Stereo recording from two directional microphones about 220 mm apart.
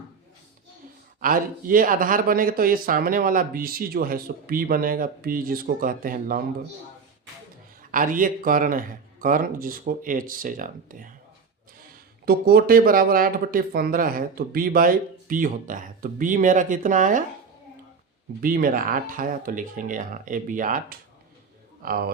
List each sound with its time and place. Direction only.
1.2 s speech: 40° right (ahead or behind)
7.8 s speech: 40° right (ahead or behind)
12.2 s speech: 45° right (ahead or behind)
18.3 s speech: 40° right (ahead or behind)